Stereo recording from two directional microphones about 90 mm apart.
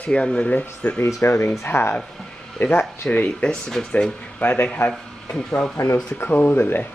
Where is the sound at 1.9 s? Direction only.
5° left (ahead or behind); by 4.9 s 20° left (ahead or behind).